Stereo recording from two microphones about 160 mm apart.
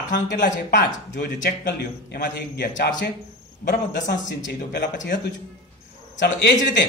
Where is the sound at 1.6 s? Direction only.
90° left.